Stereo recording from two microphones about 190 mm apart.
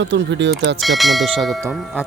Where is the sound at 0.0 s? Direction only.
65° right (ahead or behind).